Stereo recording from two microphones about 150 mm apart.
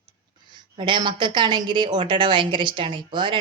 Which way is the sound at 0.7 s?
30° right (ahead or behind).